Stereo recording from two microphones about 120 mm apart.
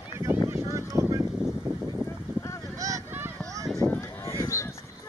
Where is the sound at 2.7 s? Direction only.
30° right (ahead or behind).